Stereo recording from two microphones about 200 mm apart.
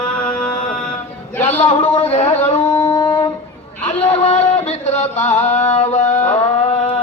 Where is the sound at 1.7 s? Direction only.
30° left (ahead or behind).